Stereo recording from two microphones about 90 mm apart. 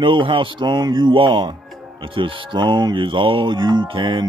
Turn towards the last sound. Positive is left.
turn(degrees=-60)  # may be behind; listen again after turning